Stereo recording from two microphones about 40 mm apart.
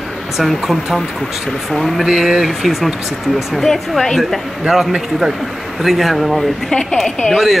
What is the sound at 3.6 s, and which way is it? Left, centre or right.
Speech, centre.